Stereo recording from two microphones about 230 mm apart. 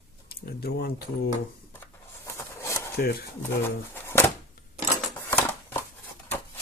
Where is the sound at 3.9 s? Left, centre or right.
Centre.